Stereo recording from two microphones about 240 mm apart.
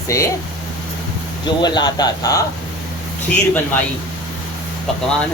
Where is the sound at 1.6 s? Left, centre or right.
Centre.